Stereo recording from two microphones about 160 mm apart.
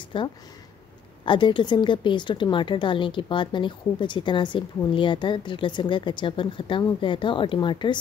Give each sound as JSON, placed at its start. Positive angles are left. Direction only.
{"t": 0.1, "sound": "speech", "side_deg": 30}